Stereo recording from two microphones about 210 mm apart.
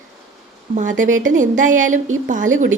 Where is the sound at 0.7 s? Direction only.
35° right (ahead or behind).